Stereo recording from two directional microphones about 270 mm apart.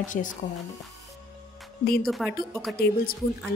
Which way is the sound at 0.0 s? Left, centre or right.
Left.